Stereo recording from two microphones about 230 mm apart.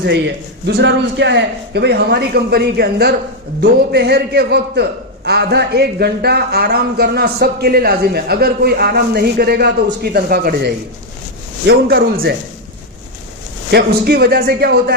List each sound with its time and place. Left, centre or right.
0.8 s a man's voice: right
13.7 s a man's voice: right